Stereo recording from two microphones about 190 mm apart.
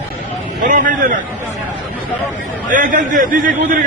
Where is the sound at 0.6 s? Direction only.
45° right (ahead or behind).